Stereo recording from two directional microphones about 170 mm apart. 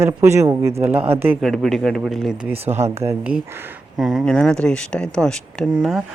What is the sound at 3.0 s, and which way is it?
Speech, 15° right (ahead or behind).